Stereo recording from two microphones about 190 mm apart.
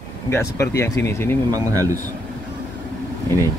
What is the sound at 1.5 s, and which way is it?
Speech, 20° right (ahead or behind).